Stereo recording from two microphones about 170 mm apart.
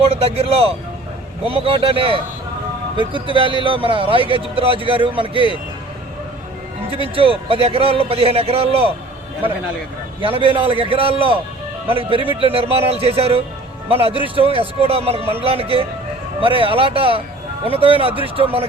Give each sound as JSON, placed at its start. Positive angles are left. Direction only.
{"t": 0.0, "sound": "speech", "side_deg": -35}
{"t": 3.2, "sound": "speech", "side_deg": -30}
{"t": 6.9, "sound": "speech", "side_deg": -35}
{"t": 10.2, "sound": "speech", "side_deg": -30}